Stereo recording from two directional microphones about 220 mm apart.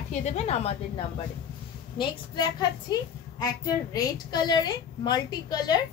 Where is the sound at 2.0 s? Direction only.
20° left (ahead or behind).